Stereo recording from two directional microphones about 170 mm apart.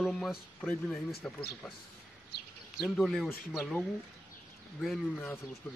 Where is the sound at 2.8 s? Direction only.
Centre (ahead or behind).